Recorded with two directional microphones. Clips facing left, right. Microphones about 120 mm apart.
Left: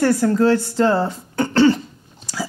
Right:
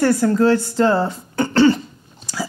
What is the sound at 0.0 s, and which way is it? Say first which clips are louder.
Speech: right 1 dB; 25° right (ahead or behind).